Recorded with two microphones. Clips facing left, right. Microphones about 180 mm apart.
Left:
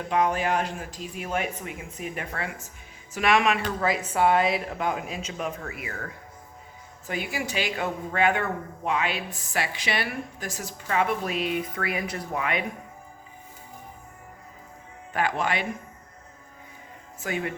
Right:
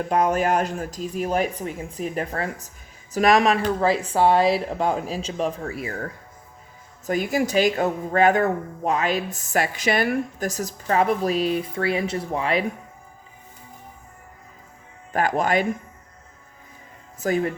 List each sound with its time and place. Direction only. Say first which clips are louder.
0.1 s speech: right 3 dB; 45° right (ahead or behind)
7.1 s speech: right 9 dB; 40° right (ahead or behind)
15.1 s speech: right 5 dB; 45° right (ahead or behind)
17.2 s speech: right 8 dB; 40° right (ahead or behind)